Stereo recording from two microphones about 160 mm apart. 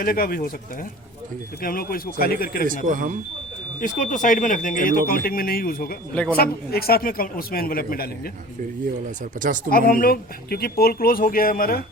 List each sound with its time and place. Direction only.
0.0 s a man's voice: 65° left (ahead or behind)
1.6 s speech: 65° left (ahead or behind)
2.8 s speech: 55° right (ahead or behind)
3.8 s a man's voice: 55° left (ahead or behind); by 8.3 s 70° left (ahead or behind)
9.6 s speech: 65° left (ahead or behind)